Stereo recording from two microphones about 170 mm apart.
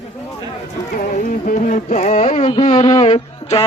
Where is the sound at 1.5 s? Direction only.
50° left (ahead or behind).